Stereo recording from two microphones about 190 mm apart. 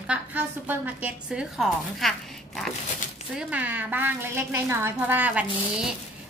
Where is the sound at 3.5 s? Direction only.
10° right (ahead or behind).